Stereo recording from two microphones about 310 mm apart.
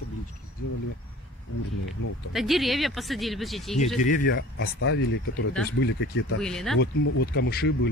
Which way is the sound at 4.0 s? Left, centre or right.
Left.